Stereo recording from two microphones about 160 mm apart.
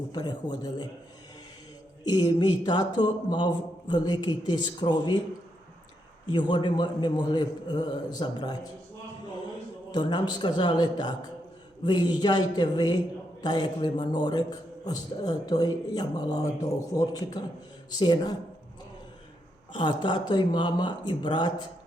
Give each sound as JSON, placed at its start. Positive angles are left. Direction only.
{"t": 0.1, "sound": "speech", "side_deg": 25}
{"t": 2.0, "sound": "speech", "side_deg": 25}
{"t": 6.3, "sound": "speech", "side_deg": 30}
{"t": 9.9, "sound": "speech", "side_deg": 30}
{"t": 19.7, "sound": "speech", "side_deg": 30}